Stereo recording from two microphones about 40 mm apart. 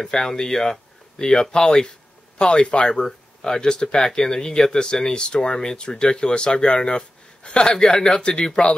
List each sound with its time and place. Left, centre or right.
0.0 s speech: centre